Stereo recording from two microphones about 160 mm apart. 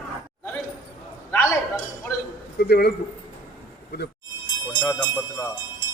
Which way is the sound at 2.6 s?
85° left.